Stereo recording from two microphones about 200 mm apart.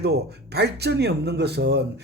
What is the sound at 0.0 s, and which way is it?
Speech, 55° right (ahead or behind).